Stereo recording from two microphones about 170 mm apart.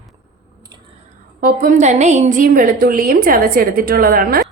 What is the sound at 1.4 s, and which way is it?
A woman's voice, 55° right (ahead or behind).